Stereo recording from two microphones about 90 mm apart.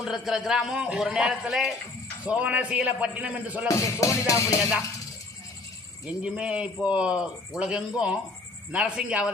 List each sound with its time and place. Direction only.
0.0 s a man's voice: 5° right (ahead or behind)
2.2 s speech: 15° right (ahead or behind)
3.7 s music: 35° left (ahead or behind)
6.1 s speech: 10° right (ahead or behind)